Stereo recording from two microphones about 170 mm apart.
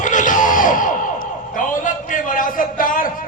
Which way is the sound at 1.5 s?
50° left (ahead or behind).